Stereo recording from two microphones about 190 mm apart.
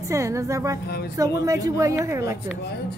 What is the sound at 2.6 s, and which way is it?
Speech, 60° left (ahead or behind).